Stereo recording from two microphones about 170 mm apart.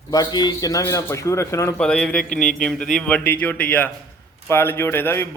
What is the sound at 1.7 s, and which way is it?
A man's voice, 5° left (ahead or behind).